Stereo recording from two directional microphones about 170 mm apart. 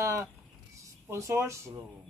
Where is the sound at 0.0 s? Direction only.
15° right (ahead or behind).